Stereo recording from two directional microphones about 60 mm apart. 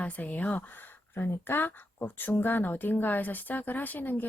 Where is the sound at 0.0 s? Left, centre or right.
Left.